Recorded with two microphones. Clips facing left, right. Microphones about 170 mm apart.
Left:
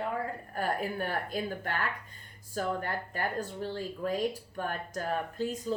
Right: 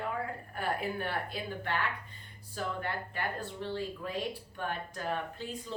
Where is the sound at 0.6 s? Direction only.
40° left (ahead or behind).